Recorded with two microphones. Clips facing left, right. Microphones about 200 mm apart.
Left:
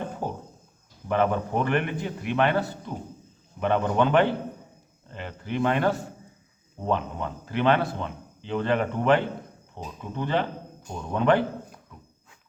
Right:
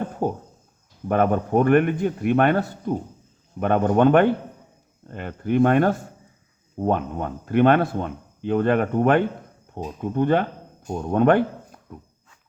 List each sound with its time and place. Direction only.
1.0 s speech: 50° right (ahead or behind)